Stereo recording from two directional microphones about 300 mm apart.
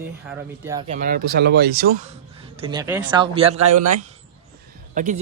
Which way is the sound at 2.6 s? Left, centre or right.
Centre.